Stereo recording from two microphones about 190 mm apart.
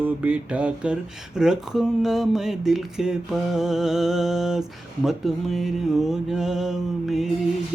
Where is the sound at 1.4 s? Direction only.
5° right (ahead or behind).